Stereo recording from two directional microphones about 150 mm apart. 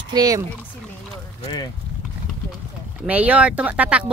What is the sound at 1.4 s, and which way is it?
Speech, 30° left (ahead or behind).